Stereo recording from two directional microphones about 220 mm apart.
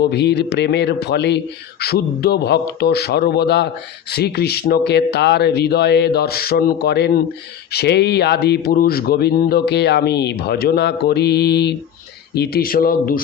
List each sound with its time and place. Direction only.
0.1 s a man's voice: 50° left (ahead or behind)